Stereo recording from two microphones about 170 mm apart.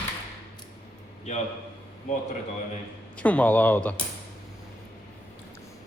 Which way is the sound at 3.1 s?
10° left (ahead or behind).